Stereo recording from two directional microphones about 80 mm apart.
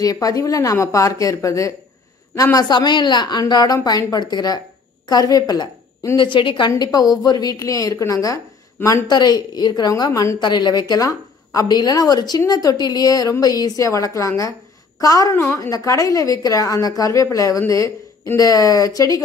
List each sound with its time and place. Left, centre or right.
0.0 s a woman's voice: left
2.7 s a woman's voice: left
6.1 s a woman's voice: left
6.8 s a woman's voice: left
7.5 s a woman's voice: left
9.1 s a woman's voice: left
9.8 s a woman's voice: left
10.4 s a woman's voice: left
13.8 s a woman's voice: left
15.3 s a woman's voice: left